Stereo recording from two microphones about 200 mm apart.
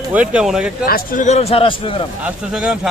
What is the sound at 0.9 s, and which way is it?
A man's voice, 45° left (ahead or behind).